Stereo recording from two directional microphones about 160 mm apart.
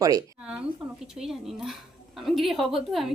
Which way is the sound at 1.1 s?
5° right (ahead or behind).